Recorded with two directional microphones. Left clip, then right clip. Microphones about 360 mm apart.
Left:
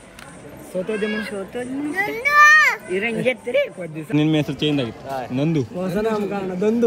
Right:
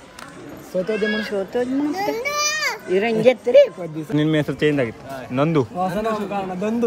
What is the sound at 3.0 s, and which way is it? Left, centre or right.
Speech, right.